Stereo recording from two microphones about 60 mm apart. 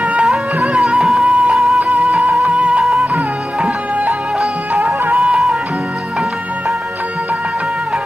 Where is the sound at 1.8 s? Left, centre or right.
Right.